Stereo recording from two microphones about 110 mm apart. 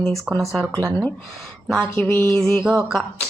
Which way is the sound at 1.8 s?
15° left (ahead or behind).